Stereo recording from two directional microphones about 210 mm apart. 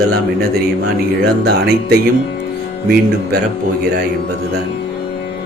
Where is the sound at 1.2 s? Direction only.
50° right (ahead or behind).